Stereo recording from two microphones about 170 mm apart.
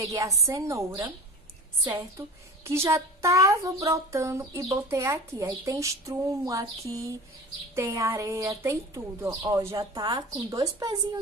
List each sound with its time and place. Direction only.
0.0 s a woman's voice: 20° right (ahead or behind)